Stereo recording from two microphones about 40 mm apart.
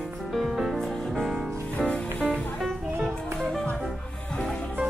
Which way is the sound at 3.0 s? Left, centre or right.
Centre.